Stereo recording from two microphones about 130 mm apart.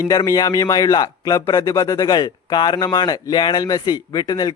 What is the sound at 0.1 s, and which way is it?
Speech, 30° left (ahead or behind).